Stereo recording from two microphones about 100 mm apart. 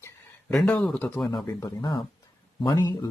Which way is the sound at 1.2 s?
30° left (ahead or behind).